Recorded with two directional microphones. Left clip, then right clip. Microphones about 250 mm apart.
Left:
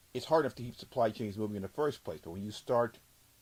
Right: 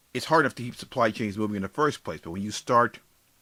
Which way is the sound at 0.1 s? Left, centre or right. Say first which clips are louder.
Right 7 dB; centre.